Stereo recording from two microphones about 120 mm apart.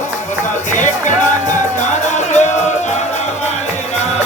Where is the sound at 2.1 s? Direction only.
75° left (ahead or behind).